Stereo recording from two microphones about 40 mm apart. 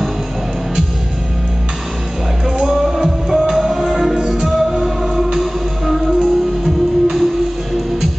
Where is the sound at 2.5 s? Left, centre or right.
Centre.